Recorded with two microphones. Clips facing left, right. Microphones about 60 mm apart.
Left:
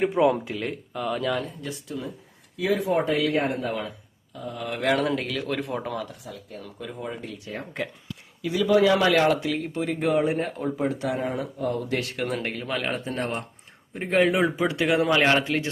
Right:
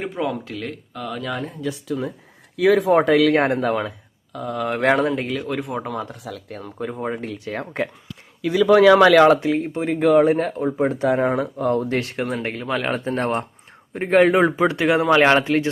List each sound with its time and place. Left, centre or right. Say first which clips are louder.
0.0 s speech: left 4 dB; centre
1.9 s speech: right 8 dB; right
2.6 s speech: right 8 dB; right
5.1 s speech: right 3 dB; centre
5.5 s speech: right 3 dB; centre
6.2 s speech: right 6 dB; right
6.6 s speech: right 8 dB; right
7.4 s speech: right 6 dB; right
9.3 s a man's voice: right 7 dB; right
10.1 s speech: right 9 dB; right
10.7 s a man's voice: right 8 dB; right
11.2 s a man's voice: right 7 dB; right
15.2 s a man's voice: right 6 dB; right